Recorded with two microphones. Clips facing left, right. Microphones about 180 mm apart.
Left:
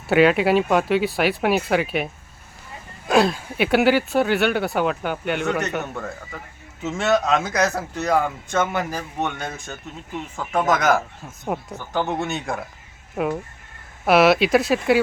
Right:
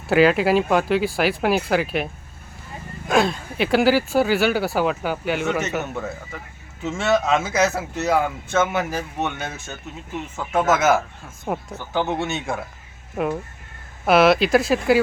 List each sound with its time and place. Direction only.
0.1 s speech: centre (ahead or behind)
3.1 s speech: 5° left (ahead or behind)
6.8 s speech: centre (ahead or behind)